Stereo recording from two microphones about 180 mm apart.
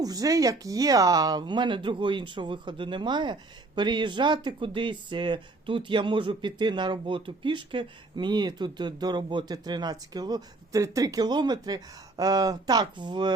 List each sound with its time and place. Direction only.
0.0 s speech: 20° right (ahead or behind)